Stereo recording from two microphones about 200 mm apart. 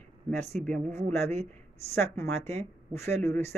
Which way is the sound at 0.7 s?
35° right (ahead or behind).